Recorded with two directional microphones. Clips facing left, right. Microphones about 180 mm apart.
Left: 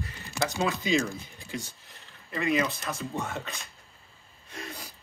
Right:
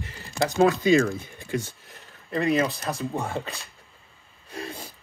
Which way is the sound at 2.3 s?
40° right (ahead or behind).